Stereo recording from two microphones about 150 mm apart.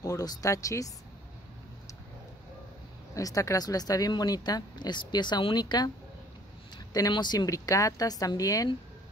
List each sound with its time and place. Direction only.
0.0 s speech: 25° left (ahead or behind)
3.2 s speech: 20° left (ahead or behind)
6.9 s speech: 25° left (ahead or behind)